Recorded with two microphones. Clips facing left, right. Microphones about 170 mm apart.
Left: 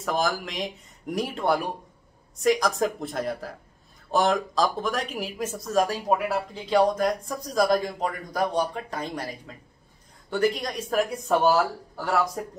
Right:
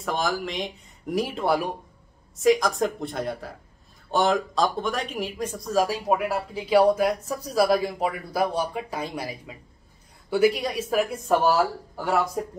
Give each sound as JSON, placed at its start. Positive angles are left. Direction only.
{"t": 0.0, "sound": "speech", "side_deg": 0}